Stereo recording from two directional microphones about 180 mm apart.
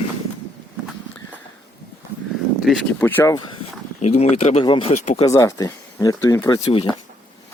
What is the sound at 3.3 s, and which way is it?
Speech, 25° left (ahead or behind).